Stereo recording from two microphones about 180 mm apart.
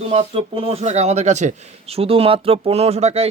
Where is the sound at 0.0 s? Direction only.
35° right (ahead or behind).